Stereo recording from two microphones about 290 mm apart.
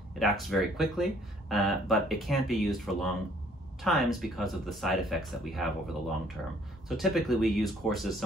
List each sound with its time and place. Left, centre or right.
0.2 s speech: centre